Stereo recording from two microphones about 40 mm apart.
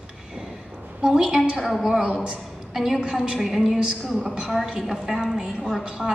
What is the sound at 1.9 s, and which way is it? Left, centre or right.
Speech, right.